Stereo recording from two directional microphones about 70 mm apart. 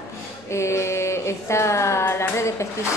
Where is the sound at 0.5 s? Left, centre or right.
Left.